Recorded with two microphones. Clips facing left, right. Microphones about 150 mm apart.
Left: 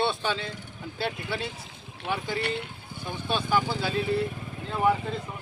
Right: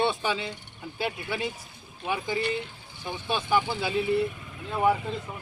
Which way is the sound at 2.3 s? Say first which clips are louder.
Right 1 dB; 60° left (ahead or behind).